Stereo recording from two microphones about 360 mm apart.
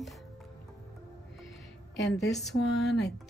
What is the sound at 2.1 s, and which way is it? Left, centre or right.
Speech, left.